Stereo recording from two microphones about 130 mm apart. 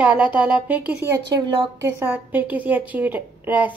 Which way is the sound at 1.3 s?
40° right (ahead or behind).